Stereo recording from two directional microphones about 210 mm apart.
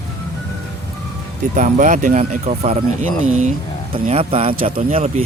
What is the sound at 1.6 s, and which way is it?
Speech, 35° right (ahead or behind).